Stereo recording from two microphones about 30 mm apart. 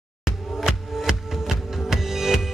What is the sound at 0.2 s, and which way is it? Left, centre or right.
Music, centre.